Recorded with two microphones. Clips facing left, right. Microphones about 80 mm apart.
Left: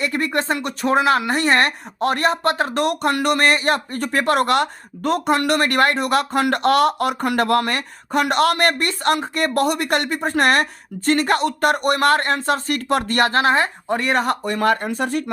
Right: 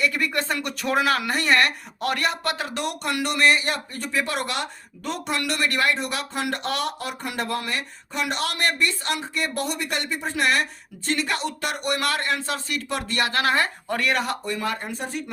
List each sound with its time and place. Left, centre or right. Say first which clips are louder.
0.0 s speech: left 3 dB; left
13.3 s speech: left 5 dB; left
14.4 s speech: left 9 dB; left